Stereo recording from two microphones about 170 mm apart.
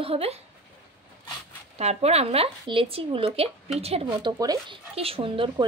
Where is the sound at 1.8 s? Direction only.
40° right (ahead or behind).